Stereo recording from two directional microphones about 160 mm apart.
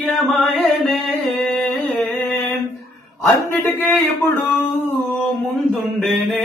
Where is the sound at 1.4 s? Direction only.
10° left (ahead or behind).